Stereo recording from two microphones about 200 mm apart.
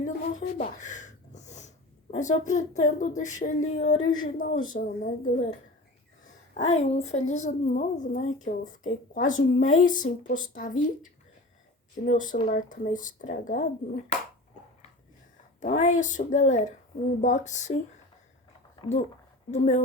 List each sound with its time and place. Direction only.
0.0 s a sound: 35° left (ahead or behind)
3.2 s speech: 40° left (ahead or behind)
15.6 s speech: 40° left (ahead or behind)
18.8 s speech: 35° left (ahead or behind)